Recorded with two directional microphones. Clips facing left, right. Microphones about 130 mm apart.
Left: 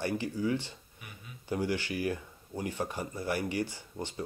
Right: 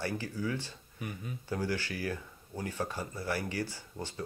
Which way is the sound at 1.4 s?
15° left (ahead or behind).